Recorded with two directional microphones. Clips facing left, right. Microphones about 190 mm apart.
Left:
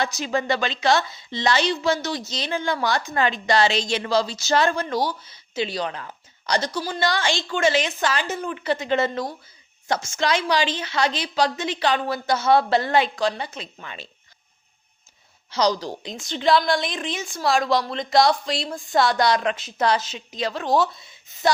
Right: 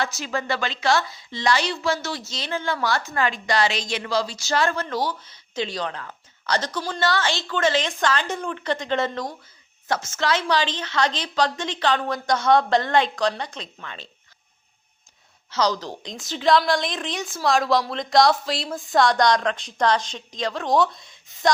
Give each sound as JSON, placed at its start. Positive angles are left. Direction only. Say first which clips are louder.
{"t": 0.0, "sound": "a woman's voice", "louder": "left 3 dB", "side_deg": 20}
{"t": 15.4, "sound": "a woman's voice", "louder": "left 2 dB", "side_deg": 15}
{"t": 16.1, "sound": "a woman's voice", "louder": "even", "side_deg": 0}